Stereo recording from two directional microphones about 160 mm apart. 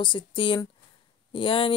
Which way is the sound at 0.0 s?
30° left (ahead or behind).